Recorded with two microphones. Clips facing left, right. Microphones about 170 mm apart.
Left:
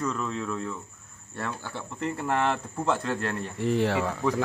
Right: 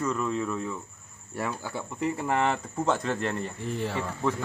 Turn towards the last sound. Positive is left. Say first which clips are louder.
# left 6 dB
turn(degrees=75)  # may be behind; listen again after turning